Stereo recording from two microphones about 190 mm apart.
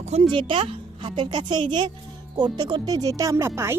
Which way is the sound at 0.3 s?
25° right (ahead or behind).